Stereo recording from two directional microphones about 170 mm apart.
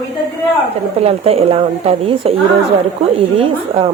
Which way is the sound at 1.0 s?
40° right (ahead or behind).